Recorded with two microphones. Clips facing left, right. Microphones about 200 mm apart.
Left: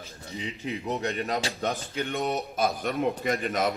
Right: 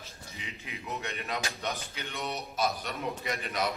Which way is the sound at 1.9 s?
50° left (ahead or behind).